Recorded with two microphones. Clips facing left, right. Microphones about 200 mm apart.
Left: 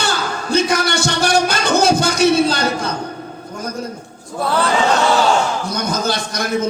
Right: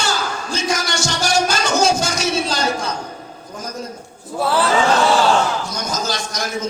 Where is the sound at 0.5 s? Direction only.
60° left (ahead or behind).